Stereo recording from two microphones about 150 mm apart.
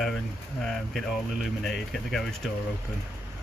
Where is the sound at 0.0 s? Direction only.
5° left (ahead or behind).